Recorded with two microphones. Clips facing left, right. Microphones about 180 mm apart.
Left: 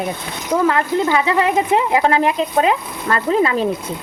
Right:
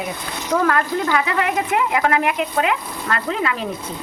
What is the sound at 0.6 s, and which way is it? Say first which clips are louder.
Speech: left 5 dB; 20° left (ahead or behind).